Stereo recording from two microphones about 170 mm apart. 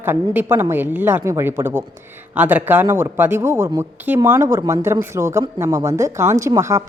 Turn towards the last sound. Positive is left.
turn(degrees=-15)  # may be behind; listen again after turning